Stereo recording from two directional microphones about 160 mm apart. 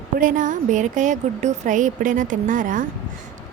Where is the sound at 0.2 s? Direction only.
55° right (ahead or behind).